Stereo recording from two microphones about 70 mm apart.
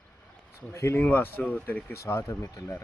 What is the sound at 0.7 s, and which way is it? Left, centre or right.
Speech, left.